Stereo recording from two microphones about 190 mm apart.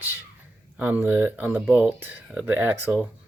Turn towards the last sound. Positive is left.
turn(degrees=-10)  # may be behind; listen again after turning